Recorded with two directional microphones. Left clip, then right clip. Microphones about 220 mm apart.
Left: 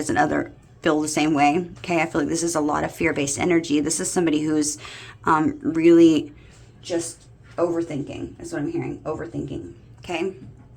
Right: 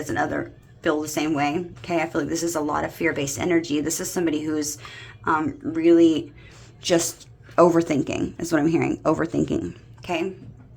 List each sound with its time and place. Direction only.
0.0 s speech: 10° left (ahead or behind)
7.5 s speech: 45° right (ahead or behind)
10.0 s a woman's voice: 10° right (ahead or behind)